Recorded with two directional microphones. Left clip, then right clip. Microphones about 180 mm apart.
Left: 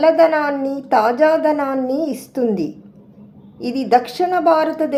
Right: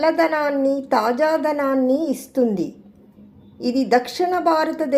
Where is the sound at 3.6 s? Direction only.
30° right (ahead or behind).